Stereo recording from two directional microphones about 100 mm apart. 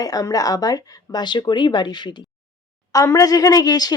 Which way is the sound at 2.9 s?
35° left (ahead or behind).